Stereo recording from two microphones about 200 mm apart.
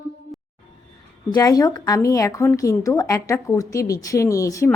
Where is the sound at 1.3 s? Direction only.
20° left (ahead or behind).